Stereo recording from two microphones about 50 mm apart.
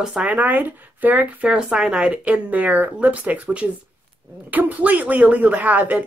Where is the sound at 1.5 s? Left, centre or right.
Centre.